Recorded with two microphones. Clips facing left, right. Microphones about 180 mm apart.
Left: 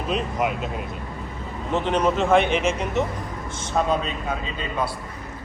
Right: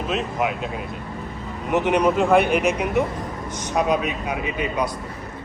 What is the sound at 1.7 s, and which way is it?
Speech, 15° right (ahead or behind).